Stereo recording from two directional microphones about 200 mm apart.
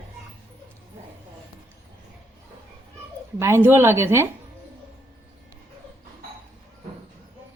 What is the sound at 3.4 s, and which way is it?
Speech, 15° right (ahead or behind).